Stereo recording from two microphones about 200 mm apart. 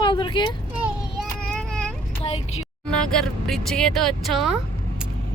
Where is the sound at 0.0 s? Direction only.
25° left (ahead or behind).